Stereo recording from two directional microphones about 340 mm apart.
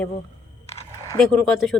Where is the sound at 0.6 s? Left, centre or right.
Centre.